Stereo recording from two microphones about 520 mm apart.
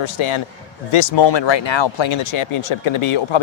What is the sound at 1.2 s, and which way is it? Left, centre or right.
Speech, left.